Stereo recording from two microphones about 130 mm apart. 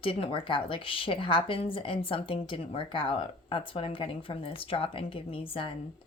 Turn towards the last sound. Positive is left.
turn(degrees=45)  # may be behind; listen again after turning